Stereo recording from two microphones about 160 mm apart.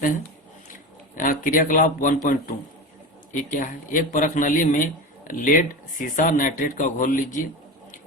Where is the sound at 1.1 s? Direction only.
60° left (ahead or behind).